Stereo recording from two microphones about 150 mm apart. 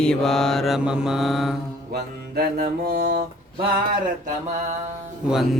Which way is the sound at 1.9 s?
90° right.